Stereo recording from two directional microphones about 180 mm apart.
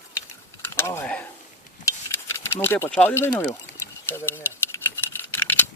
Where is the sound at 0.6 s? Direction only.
15° left (ahead or behind).